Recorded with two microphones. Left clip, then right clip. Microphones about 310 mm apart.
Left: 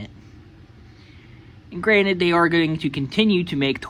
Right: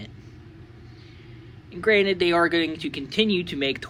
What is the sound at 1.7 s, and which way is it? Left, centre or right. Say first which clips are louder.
Speech: left 2 dB; centre.